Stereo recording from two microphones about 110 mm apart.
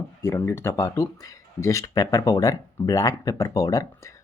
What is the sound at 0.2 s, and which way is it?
Speech, 30° left (ahead or behind).